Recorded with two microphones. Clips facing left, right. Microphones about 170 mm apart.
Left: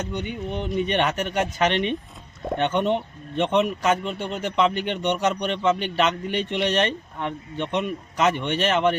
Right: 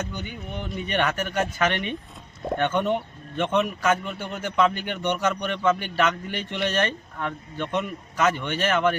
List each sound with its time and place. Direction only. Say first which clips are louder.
0.1 s speech: left 6 dB; 25° left (ahead or behind)